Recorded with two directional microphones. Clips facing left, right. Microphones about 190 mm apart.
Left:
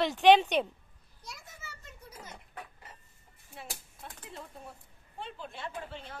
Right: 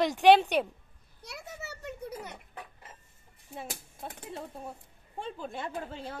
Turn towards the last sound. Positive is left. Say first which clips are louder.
# right 4 dB
turn(degrees=-50)  # may be behind; listen again after turning